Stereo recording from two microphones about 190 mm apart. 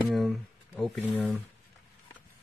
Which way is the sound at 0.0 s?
Centre (ahead or behind).